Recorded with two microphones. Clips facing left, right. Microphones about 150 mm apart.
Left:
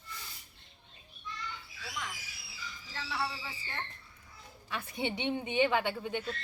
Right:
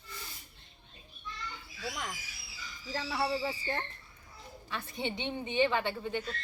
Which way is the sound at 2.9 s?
40° right (ahead or behind).